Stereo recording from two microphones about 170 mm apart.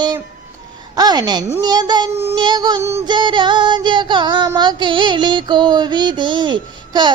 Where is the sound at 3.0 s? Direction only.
25° right (ahead or behind).